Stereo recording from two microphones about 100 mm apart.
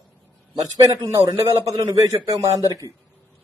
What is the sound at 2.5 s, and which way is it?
Speech, 35° left (ahead or behind).